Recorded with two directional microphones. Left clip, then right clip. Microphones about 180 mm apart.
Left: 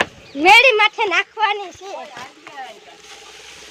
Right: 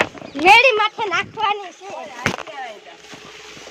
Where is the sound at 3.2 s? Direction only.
55° left (ahead or behind).